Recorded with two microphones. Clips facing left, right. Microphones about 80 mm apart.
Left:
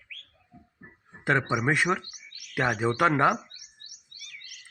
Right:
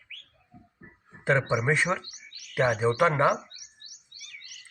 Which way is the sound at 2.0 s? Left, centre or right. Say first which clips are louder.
Even; right.